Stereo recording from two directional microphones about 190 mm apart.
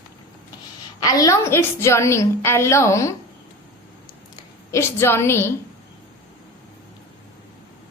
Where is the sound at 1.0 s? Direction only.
20° left (ahead or behind).